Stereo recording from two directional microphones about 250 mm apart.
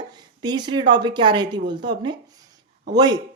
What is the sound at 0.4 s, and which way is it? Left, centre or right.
Speech, centre.